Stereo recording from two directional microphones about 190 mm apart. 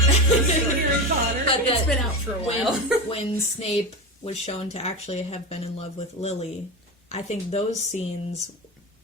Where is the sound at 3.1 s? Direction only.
35° left (ahead or behind).